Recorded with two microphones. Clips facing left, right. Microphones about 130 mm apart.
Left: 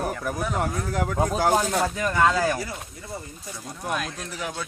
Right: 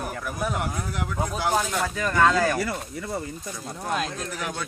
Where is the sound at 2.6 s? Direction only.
70° right (ahead or behind).